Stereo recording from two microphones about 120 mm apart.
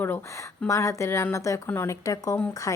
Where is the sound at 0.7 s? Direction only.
25° left (ahead or behind).